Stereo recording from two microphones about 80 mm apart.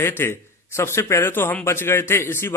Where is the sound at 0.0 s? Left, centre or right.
Left.